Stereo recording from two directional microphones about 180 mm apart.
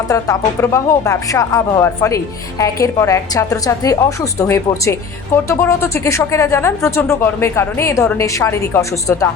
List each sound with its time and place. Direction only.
0.1 s a woman's voice: 15° left (ahead or behind)